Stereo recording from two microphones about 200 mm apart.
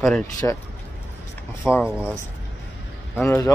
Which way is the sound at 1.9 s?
5° right (ahead or behind).